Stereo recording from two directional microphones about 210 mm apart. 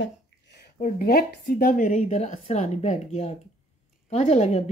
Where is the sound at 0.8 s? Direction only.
45° left (ahead or behind).